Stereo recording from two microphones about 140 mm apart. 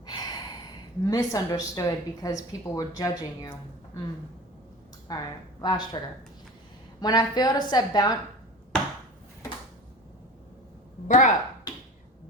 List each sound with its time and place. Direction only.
0.0 s a sound: 30° left (ahead or behind)
1.0 s speech: 25° left (ahead or behind)
5.0 s a woman's voice: 30° left (ahead or behind)
7.0 s speech: 30° left (ahead or behind)
11.1 s speech: 60° left (ahead or behind)